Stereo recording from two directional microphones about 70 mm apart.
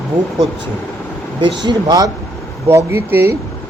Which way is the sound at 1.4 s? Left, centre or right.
Right.